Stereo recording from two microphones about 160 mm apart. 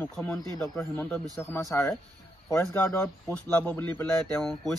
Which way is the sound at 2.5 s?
20° left (ahead or behind).